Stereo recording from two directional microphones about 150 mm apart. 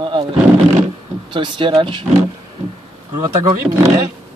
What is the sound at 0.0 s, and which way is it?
Roar, 35° right (ahead or behind).